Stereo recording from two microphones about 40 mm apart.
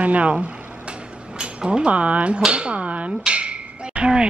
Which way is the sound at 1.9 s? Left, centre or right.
Right.